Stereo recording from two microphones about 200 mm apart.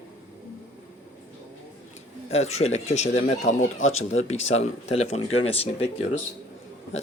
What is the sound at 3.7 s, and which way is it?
Speech, 85° left.